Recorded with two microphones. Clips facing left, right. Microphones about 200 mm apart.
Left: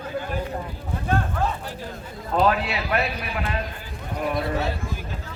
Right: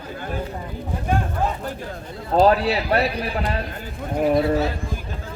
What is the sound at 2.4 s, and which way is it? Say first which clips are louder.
A man's voice: right 5 dB; 35° right (ahead or behind).